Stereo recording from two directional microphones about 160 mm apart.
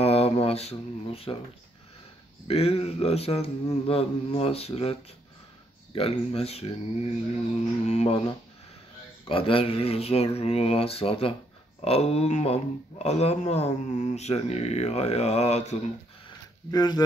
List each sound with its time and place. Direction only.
0.0 s a sound: 40° left (ahead or behind)
2.4 s a man's voice: 40° left (ahead or behind)
5.9 s a man's voice: 40° left (ahead or behind)
7.5 s mantra: 45° left (ahead or behind)
9.3 s a man's voice: 35° left (ahead or behind)
16.7 s speech: 25° left (ahead or behind)